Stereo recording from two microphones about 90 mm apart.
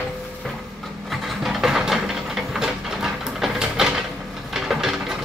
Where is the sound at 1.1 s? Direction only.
Centre (ahead or behind).